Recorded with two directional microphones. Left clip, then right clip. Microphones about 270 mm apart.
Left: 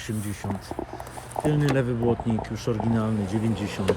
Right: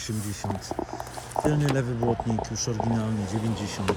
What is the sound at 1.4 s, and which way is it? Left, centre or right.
Speech, left.